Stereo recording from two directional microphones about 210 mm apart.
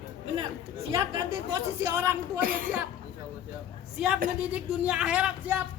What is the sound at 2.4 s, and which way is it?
Speech, 45° right (ahead or behind).